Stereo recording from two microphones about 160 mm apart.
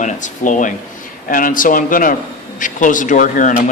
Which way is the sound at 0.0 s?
50° left (ahead or behind).